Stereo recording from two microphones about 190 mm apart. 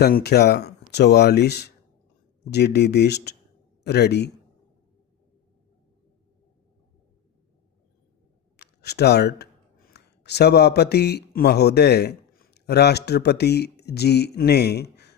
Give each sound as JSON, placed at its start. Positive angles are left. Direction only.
{"t": 0.0, "sound": "speech", "side_deg": 55}
{"t": 8.5, "sound": "speech", "side_deg": 60}